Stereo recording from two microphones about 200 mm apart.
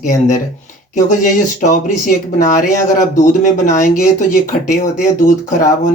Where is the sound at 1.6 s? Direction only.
40° left (ahead or behind).